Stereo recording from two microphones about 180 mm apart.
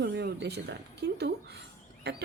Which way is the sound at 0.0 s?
65° right (ahead or behind).